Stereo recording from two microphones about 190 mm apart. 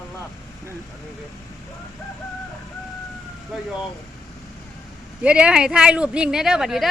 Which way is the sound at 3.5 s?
Centre (ahead or behind).